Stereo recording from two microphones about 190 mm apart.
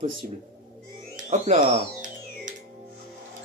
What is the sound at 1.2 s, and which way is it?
Music, 35° right (ahead or behind).